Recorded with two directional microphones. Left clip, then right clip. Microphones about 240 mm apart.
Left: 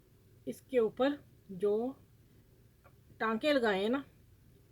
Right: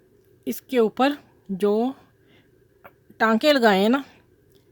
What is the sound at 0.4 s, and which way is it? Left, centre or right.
Speech, right.